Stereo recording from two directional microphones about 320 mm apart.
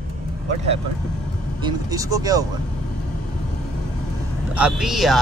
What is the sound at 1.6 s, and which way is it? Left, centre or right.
Speech, centre.